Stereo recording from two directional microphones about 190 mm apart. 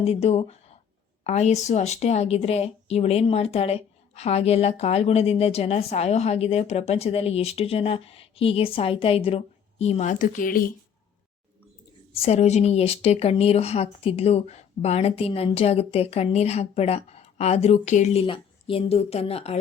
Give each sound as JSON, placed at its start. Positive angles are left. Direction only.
{"t": 0.0, "sound": "a woman's voice", "side_deg": 35}
{"t": 12.1, "sound": "a woman's voice", "side_deg": 30}